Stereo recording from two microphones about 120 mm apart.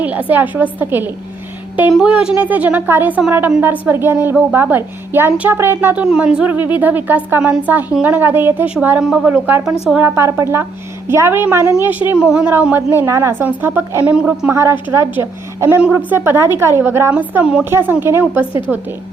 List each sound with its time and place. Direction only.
0.0 s a woman's voice: 15° right (ahead or behind)
12.5 s a woman's voice: 15° right (ahead or behind)
14.5 s a woman's voice: 20° right (ahead or behind)
18.7 s a woman's voice: 5° right (ahead or behind)